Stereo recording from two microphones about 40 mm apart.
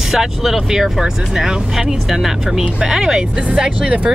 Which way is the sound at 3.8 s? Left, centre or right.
Right.